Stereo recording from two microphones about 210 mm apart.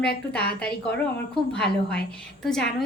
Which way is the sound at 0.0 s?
50° left (ahead or behind).